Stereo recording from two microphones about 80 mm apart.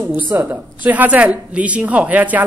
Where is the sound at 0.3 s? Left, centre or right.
Right.